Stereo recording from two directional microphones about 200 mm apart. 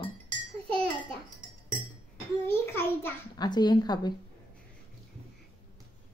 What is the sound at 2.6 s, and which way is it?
Speech, 10° left (ahead or behind).